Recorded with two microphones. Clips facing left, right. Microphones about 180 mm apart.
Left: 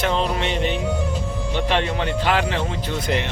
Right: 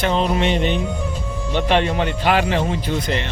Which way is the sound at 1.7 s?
15° right (ahead or behind).